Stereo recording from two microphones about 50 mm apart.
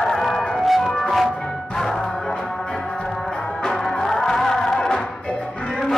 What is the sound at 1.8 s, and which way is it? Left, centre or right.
Music, centre.